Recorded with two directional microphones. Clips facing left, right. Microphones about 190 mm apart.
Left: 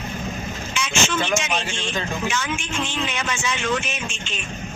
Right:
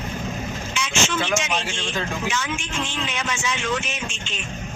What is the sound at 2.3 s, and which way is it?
Speech, 50° left (ahead or behind).